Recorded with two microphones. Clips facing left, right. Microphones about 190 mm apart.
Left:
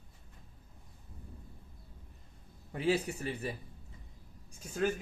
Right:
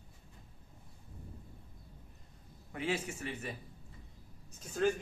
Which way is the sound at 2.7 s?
35° left (ahead or behind).